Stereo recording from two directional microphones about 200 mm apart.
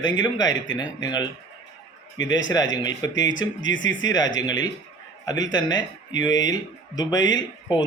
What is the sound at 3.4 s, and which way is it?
Speech, 70° left (ahead or behind).